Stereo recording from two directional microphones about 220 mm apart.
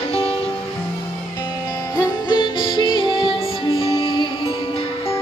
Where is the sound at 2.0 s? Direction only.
20° left (ahead or behind).